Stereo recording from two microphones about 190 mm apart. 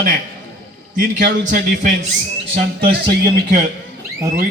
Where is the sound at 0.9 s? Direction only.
45° right (ahead or behind).